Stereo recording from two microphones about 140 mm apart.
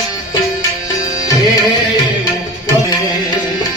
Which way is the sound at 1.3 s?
25° left (ahead or behind).